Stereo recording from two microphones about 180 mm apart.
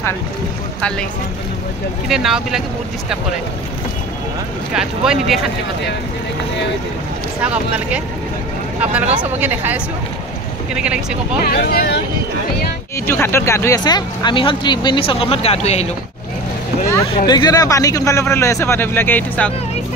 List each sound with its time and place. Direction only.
0.7 s speech: 5° left (ahead or behind)
2.0 s speech: centre (ahead or behind)
4.7 s speech: 5° right (ahead or behind)
7.4 s speech: 5° right (ahead or behind)
9.1 s speech: 10° right (ahead or behind)
11.4 s speech: 60° left (ahead or behind)
13.0 s speech: 15° left (ahead or behind); by 15.9 s 35° left (ahead or behind)
17.3 s speech: 20° left (ahead or behind)